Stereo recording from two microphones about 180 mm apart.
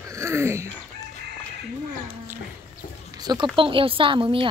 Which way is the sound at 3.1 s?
20° right (ahead or behind).